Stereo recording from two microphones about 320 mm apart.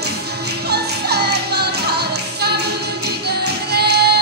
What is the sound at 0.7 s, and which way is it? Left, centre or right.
Music, right.